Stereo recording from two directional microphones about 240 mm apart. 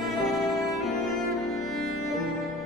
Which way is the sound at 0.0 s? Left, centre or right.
Centre.